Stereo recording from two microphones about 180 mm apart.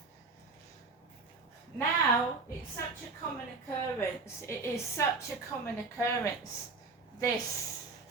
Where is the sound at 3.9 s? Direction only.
15° left (ahead or behind).